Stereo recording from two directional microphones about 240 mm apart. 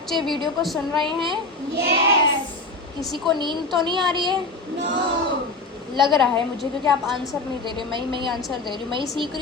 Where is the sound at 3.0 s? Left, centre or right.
Centre.